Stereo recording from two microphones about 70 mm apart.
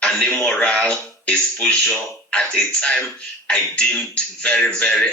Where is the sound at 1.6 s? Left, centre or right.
Centre.